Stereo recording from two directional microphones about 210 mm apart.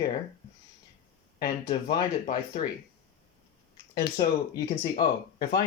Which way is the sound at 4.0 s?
20° left (ahead or behind).